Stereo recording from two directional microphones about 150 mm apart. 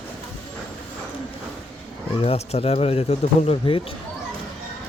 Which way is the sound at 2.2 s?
40° left (ahead or behind).